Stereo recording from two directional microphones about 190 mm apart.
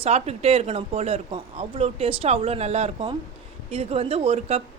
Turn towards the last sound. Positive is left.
turn(degrees=-30)  # may be behind; listen again after turning